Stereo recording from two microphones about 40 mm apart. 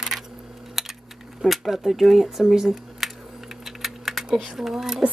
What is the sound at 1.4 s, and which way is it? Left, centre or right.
Speech, centre.